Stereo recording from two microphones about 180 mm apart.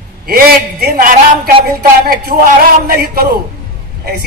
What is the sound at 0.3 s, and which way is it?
A woman's voice, 60° right (ahead or behind).